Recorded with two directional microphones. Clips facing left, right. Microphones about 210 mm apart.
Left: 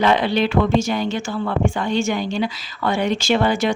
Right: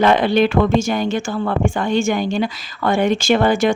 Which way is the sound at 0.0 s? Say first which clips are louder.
Right 4 dB; 50° right (ahead or behind).